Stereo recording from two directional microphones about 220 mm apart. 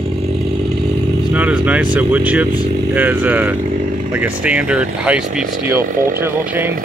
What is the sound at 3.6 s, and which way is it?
Vehicle, 35° right (ahead or behind).